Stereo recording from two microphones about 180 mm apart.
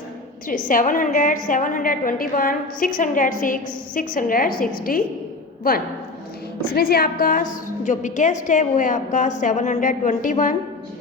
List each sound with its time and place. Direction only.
0.4 s a woman's voice: 50° left (ahead or behind)